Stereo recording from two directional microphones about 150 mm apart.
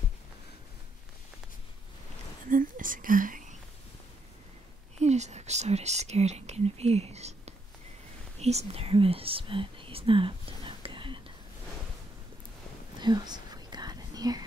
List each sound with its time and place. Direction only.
2.5 s speech: 65° right (ahead or behind)
4.9 s speech: 50° right (ahead or behind)
13.0 s whispering: 30° right (ahead or behind)